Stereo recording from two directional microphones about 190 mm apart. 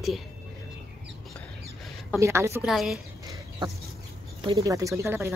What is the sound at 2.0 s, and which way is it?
Speech, 15° right (ahead or behind).